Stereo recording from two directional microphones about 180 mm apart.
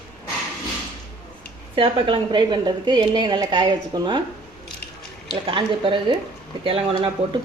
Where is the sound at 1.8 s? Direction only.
30° right (ahead or behind).